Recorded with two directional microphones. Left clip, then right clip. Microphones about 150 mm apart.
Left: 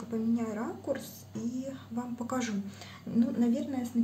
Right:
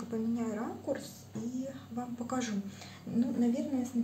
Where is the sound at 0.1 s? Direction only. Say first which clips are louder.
Left 3 dB; 10° left (ahead or behind).